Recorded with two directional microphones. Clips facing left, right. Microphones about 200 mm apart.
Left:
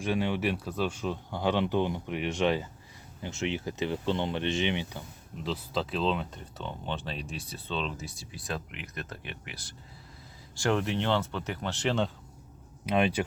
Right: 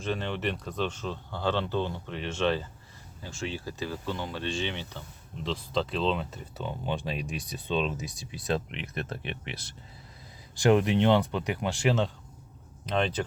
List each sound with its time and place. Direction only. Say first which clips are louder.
0.0 s speech: left 2 dB; 10° left (ahead or behind); by 12.1 s 5° right (ahead or behind)
12.8 s speech: left 2 dB; 10° left (ahead or behind)